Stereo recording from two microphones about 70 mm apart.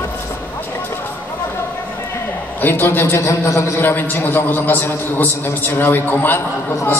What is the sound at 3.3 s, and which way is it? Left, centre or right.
Speech, left.